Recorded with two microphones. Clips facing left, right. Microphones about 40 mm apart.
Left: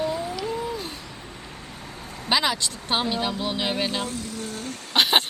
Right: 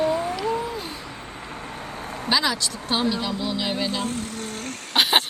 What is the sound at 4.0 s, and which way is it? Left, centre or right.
Speech, right.